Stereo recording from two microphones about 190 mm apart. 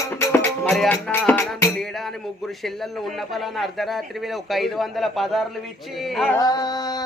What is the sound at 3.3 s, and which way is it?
Speech, centre (ahead or behind).